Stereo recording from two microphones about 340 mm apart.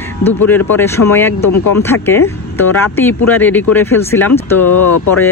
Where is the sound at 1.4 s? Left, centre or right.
Left.